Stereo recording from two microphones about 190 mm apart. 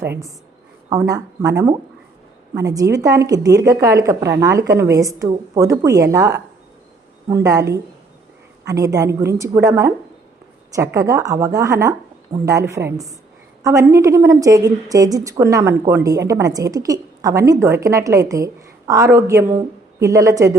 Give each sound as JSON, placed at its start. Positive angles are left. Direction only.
{"t": 0.0, "sound": "a woman's voice", "side_deg": -15}